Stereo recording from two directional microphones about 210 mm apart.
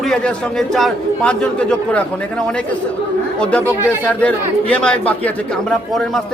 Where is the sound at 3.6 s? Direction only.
10° right (ahead or behind).